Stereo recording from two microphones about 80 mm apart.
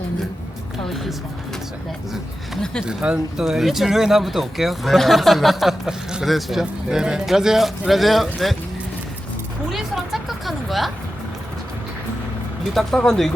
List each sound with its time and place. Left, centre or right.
0.9 s speech: centre
2.8 s speech: centre
9.7 s speech: centre
13.0 s speech: centre